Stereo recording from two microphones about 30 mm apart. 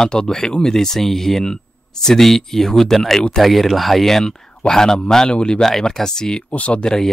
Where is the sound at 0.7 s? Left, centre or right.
Centre.